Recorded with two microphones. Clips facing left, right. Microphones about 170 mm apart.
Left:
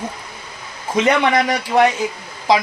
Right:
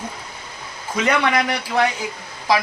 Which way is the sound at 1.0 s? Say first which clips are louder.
Left 3 dB; 20° left (ahead or behind).